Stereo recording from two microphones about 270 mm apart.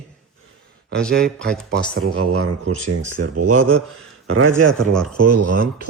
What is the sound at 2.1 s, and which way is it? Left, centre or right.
A man's voice, right.